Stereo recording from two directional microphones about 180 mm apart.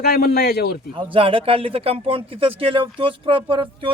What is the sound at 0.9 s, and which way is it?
Speech, 30° right (ahead or behind).